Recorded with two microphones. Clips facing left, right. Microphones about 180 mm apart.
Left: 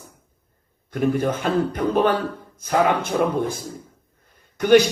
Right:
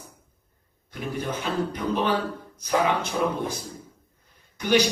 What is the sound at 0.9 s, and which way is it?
A man's voice, 50° left (ahead or behind).